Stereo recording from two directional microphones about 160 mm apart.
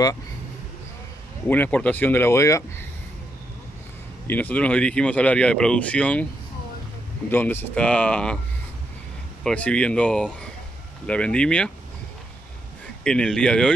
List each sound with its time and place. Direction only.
1.5 s speech: 10° left (ahead or behind)
4.3 s speech: 10° left (ahead or behind)
7.2 s speech: 10° left (ahead or behind)
9.4 s speech: 5° left (ahead or behind)
13.0 s speech: 5° left (ahead or behind)